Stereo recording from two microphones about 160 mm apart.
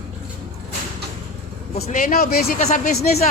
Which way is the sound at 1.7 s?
50° left (ahead or behind).